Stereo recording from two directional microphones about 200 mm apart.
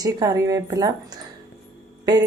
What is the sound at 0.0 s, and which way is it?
Speech, 20° right (ahead or behind).